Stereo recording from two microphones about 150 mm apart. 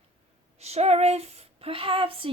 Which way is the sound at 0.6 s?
45° right (ahead or behind).